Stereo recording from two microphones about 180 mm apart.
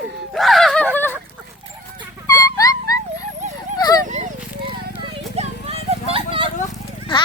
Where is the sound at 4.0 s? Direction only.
40° right (ahead or behind).